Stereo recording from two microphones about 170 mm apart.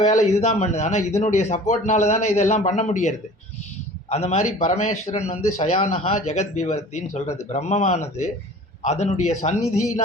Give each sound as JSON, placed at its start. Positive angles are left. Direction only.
{"t": 0.0, "sound": "a man's voice", "side_deg": 45}